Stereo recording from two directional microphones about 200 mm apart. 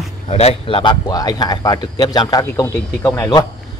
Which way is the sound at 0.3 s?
30° left (ahead or behind).